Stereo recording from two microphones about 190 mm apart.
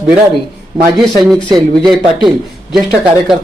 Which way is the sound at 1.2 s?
Centre (ahead or behind).